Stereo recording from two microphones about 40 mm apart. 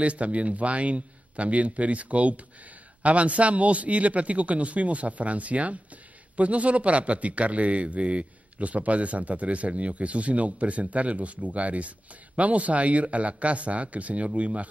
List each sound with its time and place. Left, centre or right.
0.0 s speech: right